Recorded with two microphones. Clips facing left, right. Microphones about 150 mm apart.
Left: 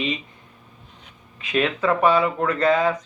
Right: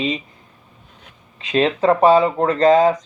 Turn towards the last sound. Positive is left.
turn(degrees=-35)  # may be behind; listen again after turning